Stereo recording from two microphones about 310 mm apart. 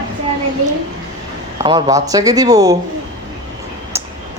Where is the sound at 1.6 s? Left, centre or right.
Centre.